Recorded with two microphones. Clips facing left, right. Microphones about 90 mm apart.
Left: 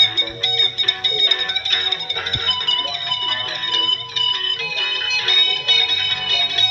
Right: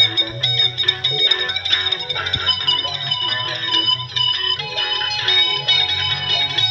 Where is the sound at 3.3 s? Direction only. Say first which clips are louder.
Right 1 dB; 55° right (ahead or behind).